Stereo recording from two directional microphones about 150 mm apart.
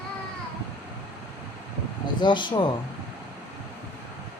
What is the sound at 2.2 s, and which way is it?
Speech, 30° left (ahead or behind).